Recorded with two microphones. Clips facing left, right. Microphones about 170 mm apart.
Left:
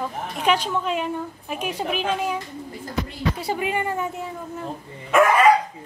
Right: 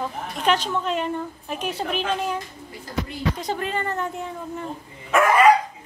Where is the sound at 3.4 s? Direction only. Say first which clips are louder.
Left 2 dB; 10° left (ahead or behind).